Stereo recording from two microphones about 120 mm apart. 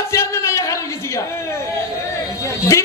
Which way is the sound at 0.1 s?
25° left (ahead or behind).